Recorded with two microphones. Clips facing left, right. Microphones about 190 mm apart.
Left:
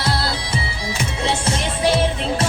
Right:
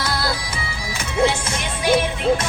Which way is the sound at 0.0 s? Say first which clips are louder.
Left 2 dB; 30° left (ahead or behind).